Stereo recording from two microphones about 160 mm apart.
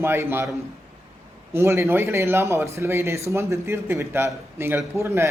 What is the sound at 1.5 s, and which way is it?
A man's voice, 15° right (ahead or behind).